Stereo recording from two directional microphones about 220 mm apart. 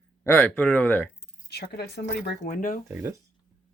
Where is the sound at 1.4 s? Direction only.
50° left (ahead or behind).